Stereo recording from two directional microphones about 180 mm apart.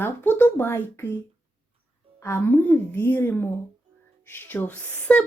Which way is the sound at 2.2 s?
10° left (ahead or behind).